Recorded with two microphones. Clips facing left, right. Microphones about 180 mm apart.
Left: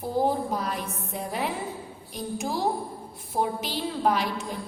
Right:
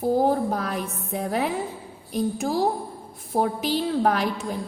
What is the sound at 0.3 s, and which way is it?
A woman's voice, 50° right (ahead or behind).